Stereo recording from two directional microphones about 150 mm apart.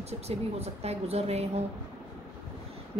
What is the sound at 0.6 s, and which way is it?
A woman's voice, 45° right (ahead or behind).